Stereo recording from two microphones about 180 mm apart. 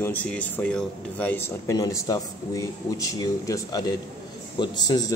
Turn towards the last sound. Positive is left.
turn(degrees=20)  # may be behind; listen again after turning